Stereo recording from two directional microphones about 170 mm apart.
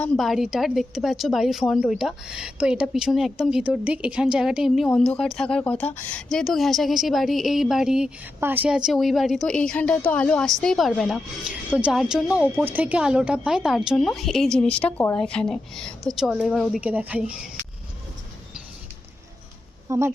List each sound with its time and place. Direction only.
0.0 s a woman's voice: centre (ahead or behind)
19.9 s a woman's voice: 15° right (ahead or behind)